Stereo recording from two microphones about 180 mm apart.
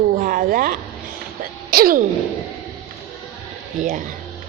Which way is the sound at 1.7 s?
55° right (ahead or behind).